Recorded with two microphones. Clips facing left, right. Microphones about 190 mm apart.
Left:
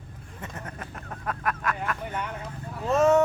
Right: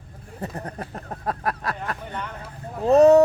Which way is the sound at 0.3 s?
35° right (ahead or behind).